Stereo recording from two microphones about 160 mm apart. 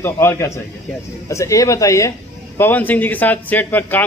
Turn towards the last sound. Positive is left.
turn(degrees=10)  # may be behind; listen again after turning